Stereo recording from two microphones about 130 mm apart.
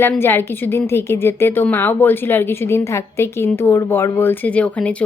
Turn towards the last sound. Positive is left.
turn(degrees=10)  # may be behind; listen again after turning